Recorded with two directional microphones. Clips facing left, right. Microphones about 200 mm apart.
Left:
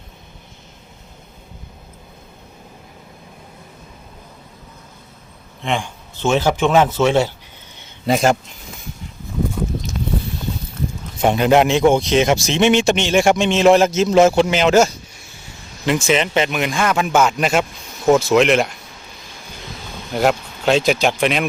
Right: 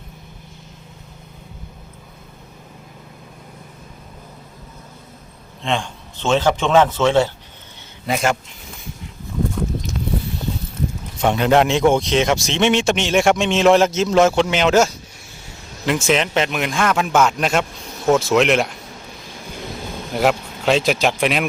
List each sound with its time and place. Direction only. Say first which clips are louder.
5.6 s a man's voice: even; 10° left (ahead or behind)
8.0 s speech: left 4 dB; 35° left (ahead or behind)
11.2 s speech: left 2 dB; 10° left (ahead or behind)
15.9 s speech: left 1 dB; centre (ahead or behind)
20.1 s speech: left 1 dB; centre (ahead or behind)